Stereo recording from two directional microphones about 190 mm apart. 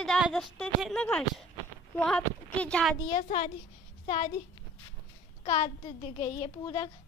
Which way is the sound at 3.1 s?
35° left (ahead or behind).